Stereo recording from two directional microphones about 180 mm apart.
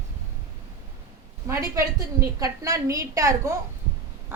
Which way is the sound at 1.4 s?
20° right (ahead or behind).